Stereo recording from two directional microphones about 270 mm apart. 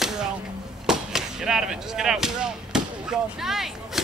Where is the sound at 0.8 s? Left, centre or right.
Centre.